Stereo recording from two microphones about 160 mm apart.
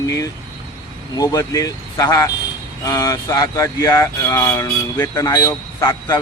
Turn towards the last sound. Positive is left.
turn(degrees=25)  # may be behind; listen again after turning